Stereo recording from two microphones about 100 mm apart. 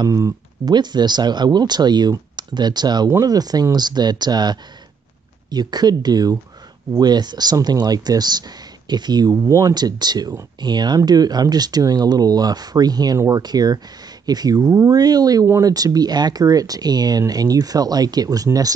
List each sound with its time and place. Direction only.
0.0 s speech: 40° right (ahead or behind)
9.3 s speech: 35° right (ahead or behind)